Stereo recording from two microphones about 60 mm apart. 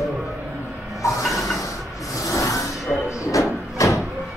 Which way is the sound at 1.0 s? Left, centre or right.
Left.